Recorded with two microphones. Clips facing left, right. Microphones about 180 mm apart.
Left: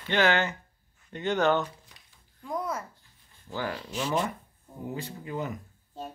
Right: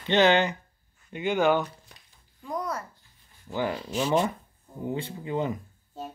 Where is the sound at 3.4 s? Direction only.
20° right (ahead or behind).